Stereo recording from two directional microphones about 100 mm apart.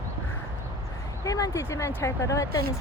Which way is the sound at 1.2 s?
35° left (ahead or behind).